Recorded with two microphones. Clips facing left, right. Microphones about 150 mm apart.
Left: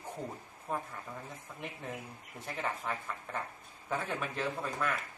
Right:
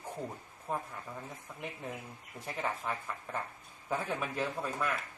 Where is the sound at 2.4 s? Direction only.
10° right (ahead or behind).